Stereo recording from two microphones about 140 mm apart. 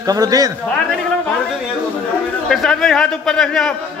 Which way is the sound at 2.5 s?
5° left (ahead or behind).